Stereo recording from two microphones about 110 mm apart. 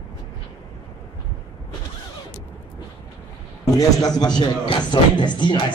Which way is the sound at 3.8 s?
35° left (ahead or behind).